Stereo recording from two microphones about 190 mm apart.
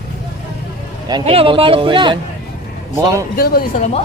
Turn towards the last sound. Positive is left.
turn(degrees=40)  # may be behind; listen again after turning